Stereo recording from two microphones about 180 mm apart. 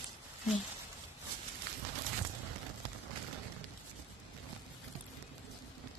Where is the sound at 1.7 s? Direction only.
65° right (ahead or behind).